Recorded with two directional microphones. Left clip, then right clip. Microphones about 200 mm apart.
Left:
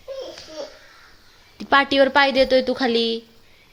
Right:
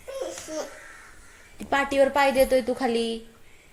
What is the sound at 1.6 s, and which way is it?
A woman's voice, 35° left (ahead or behind).